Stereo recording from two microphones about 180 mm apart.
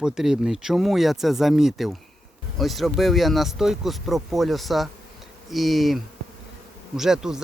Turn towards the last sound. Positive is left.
turn(degrees=-5)  # may be behind; listen again after turning